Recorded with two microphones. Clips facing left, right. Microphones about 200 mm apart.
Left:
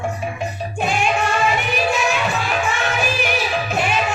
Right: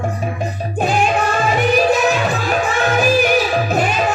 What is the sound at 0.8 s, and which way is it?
Music, 35° right (ahead or behind).